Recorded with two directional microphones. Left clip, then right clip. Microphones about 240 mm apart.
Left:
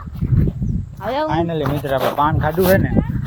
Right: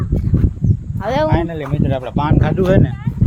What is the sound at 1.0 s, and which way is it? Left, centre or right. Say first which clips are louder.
Speech: right 3 dB; right.